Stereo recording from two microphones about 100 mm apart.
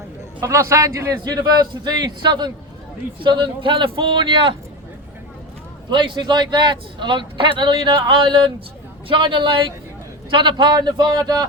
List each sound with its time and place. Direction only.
0.4 s a man's voice: 30° right (ahead or behind)
1.2 s a man's voice: 40° right (ahead or behind); by 4.5 s 60° right (ahead or behind)
5.9 s a man's voice: 50° right (ahead or behind)